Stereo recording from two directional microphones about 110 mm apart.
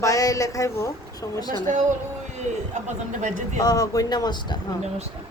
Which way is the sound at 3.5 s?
30° left (ahead or behind).